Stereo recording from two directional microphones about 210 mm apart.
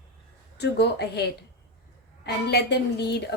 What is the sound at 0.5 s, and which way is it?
A woman's voice, 50° left (ahead or behind).